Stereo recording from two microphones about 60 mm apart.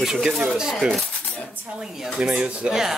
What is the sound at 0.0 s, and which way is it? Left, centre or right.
Speech, centre.